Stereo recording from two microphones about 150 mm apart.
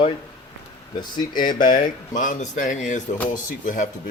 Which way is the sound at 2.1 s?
60° left (ahead or behind).